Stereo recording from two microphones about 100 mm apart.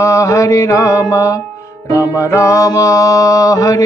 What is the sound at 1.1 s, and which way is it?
Music, 35° left (ahead or behind).